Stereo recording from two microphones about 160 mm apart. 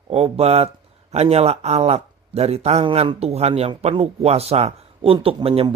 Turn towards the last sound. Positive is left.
turn(degrees=-35)  # may be behind; listen again after turning